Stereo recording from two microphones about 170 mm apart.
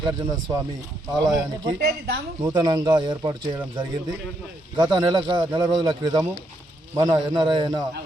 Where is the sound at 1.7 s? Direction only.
65° right (ahead or behind).